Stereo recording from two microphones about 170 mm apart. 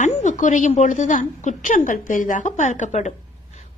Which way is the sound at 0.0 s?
45° left (ahead or behind).